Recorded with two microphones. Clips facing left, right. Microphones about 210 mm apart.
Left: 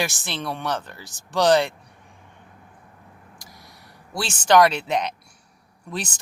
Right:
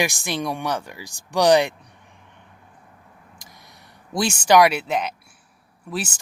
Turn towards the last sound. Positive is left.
turn(degrees=-5)  # may be behind; listen again after turning